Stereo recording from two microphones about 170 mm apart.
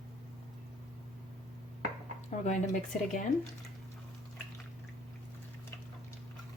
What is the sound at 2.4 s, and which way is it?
Speech, 45° left (ahead or behind).